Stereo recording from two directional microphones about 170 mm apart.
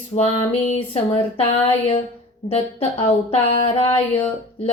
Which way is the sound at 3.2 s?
30° left (ahead or behind).